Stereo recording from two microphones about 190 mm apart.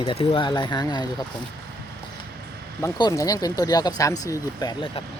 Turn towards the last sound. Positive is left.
turn(degrees=25)  # may be behind; listen again after turning